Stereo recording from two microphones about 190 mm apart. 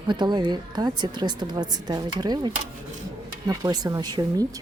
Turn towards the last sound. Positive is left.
turn(degrees=-20)  # may be behind; listen again after turning